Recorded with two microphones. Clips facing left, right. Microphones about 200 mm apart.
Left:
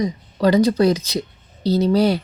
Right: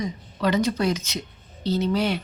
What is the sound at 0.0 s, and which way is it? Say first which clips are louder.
Speech: left 7 dB; 35° left (ahead or behind).